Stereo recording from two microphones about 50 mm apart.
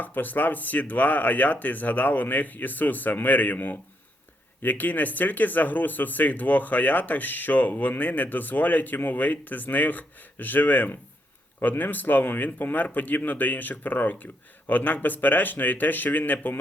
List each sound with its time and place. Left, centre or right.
0.0 s speech: left